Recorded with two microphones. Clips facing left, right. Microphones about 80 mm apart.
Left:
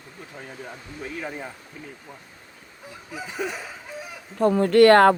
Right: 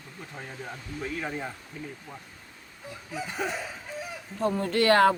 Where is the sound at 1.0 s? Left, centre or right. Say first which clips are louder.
Even; centre.